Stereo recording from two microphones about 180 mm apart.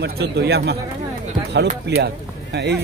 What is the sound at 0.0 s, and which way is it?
Speech, 65° right (ahead or behind).